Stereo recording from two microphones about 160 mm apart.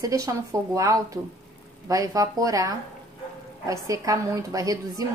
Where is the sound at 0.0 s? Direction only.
20° right (ahead or behind).